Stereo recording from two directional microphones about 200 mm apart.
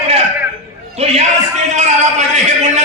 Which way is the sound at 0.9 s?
30° right (ahead or behind).